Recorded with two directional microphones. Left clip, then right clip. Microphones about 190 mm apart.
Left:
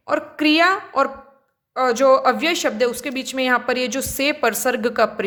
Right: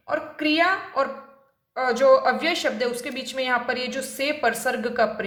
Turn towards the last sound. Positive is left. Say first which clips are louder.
# left 4 dB
turn(degrees=50)  # may be behind; listen again after turning